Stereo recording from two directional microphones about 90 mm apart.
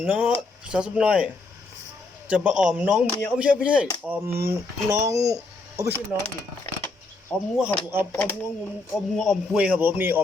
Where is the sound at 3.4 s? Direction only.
15° right (ahead or behind).